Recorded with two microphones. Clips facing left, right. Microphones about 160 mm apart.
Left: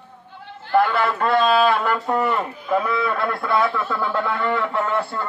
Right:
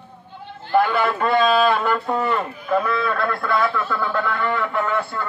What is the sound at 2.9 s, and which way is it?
A man's voice, 15° left (ahead or behind).